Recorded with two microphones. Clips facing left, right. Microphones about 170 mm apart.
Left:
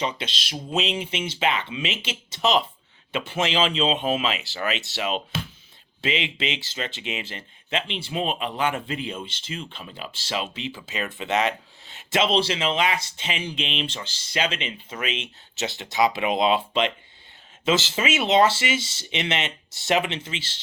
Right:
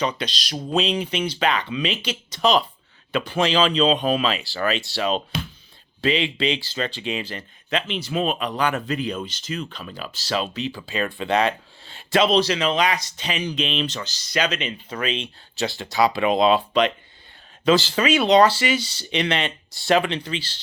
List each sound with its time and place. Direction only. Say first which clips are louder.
0.2 s speech: right 4 dB; 25° left (ahead or behind)
15.0 s speech: right 4 dB; 30° right (ahead or behind)
15.5 s speech: right 2 dB; 20° left (ahead or behind)